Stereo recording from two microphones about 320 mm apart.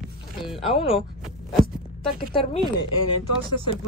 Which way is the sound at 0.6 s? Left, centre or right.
Centre.